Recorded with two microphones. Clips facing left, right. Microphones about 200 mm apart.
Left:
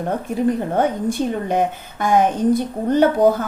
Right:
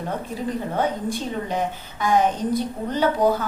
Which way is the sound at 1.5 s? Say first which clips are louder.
Left 6 dB; 50° left (ahead or behind).